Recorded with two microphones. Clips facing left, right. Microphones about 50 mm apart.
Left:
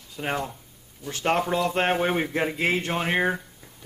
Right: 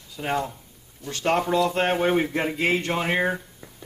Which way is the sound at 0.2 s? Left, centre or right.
Centre.